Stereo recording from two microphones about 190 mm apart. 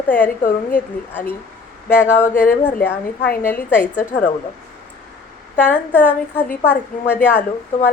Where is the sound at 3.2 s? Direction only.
50° left (ahead or behind).